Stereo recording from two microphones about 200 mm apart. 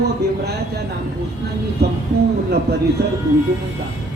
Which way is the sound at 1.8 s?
55° right (ahead or behind).